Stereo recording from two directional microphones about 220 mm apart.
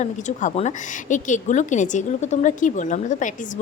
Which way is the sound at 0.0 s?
35° left (ahead or behind).